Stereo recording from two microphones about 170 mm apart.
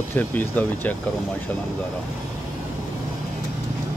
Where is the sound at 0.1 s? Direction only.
10° left (ahead or behind).